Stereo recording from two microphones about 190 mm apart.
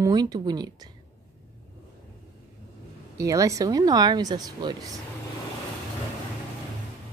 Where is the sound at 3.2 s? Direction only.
15° right (ahead or behind).